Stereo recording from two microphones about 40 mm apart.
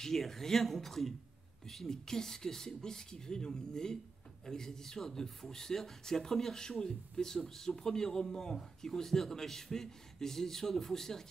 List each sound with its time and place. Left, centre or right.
0.0 s a man's voice: centre